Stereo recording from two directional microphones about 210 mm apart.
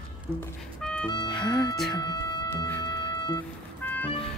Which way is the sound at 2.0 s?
20° left (ahead or behind).